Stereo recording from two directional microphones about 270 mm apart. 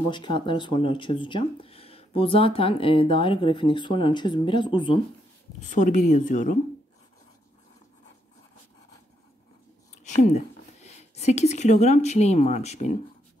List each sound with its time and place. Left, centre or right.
0.1 s speech: centre
5.7 s speech: left
10.0 s speech: left